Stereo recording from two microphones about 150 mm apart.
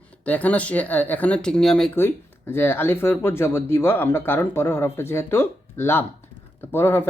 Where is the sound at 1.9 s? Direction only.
15° left (ahead or behind).